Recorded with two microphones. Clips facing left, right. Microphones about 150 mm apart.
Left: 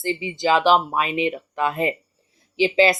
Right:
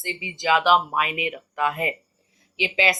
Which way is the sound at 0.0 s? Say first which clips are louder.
Left 6 dB; 30° left (ahead or behind).